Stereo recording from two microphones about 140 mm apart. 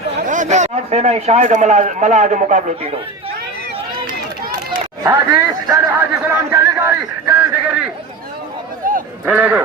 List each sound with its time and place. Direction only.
0.3 s a man's voice: 60° right (ahead or behind)
5.0 s a man's voice: 20° right (ahead or behind)
8.8 s a sound: 80° right
9.2 s a man's voice: 10° right (ahead or behind)